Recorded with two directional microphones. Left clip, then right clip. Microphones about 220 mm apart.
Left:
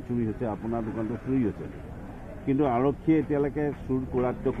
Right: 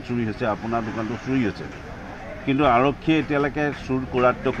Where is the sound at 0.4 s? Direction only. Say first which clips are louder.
Right 7 dB; 55° right (ahead or behind).